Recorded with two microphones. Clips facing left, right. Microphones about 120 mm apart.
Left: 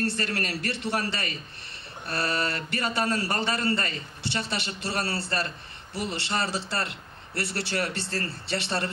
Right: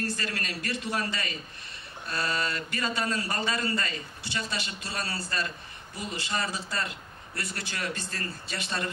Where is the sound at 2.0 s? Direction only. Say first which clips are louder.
Left 2 dB; 60° left (ahead or behind).